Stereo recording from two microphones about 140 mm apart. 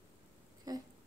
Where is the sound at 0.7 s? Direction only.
25° right (ahead or behind).